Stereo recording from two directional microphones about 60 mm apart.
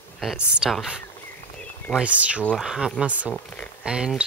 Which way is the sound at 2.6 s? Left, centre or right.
Centre.